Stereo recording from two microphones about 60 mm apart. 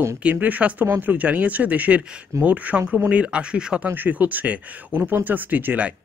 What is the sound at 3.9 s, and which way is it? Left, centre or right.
Speech, right.